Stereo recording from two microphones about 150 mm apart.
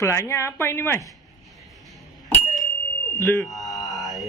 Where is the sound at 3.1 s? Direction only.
20° left (ahead or behind).